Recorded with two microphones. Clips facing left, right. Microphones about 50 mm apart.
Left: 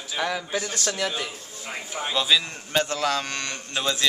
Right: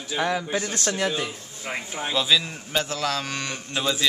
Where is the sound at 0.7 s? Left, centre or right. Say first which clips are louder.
Right 2 dB; right.